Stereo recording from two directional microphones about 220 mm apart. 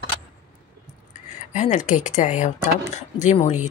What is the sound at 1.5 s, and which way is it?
Speech, 35° left (ahead or behind).